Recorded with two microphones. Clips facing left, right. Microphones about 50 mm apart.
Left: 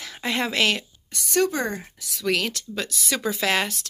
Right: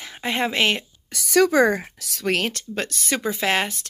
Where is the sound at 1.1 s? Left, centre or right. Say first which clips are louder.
Right 5 dB; right.